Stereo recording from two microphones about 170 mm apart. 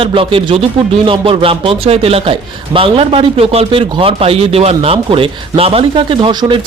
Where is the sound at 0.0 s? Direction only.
30° right (ahead or behind).